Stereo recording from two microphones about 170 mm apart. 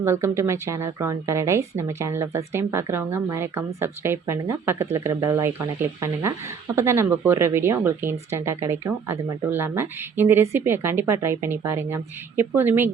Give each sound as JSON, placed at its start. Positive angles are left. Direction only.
{"t": 0.0, "sound": "a woman's voice", "side_deg": -15}